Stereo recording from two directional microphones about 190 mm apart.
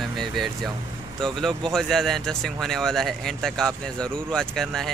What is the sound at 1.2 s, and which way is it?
Speech, centre (ahead or behind).